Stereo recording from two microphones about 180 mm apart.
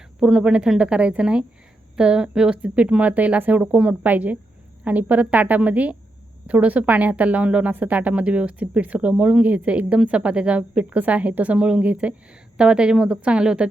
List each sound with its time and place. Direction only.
0.2 s a woman's voice: 5° right (ahead or behind)